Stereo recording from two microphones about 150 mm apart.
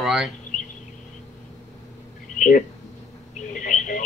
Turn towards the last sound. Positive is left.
turn(degrees=60)  # may be behind; listen again after turning